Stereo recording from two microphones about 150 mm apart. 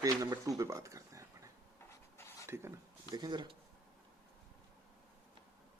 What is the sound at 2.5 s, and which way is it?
Speech, 15° right (ahead or behind).